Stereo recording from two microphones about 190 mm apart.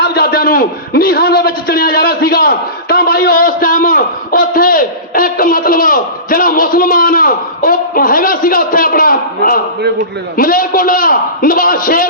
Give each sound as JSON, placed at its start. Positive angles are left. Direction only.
{"t": 0.0, "sound": "a man's voice", "side_deg": 55}